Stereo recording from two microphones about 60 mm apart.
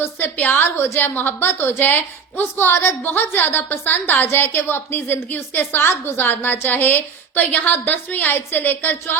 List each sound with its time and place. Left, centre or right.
0.3 s a woman's voice: left